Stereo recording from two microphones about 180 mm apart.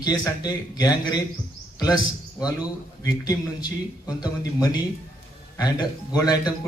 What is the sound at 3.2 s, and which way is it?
Speech, 20° left (ahead or behind).